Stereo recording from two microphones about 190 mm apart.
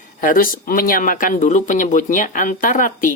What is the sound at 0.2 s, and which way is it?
Speech, 45° left (ahead or behind).